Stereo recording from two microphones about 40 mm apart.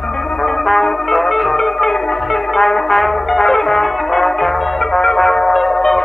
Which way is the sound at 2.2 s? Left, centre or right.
Centre.